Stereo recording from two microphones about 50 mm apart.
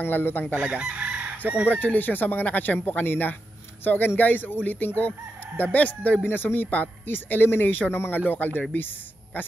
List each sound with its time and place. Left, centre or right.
0.0 s speech: left
0.6 s chicken: right
1.7 s speech: left
6.2 s speech: left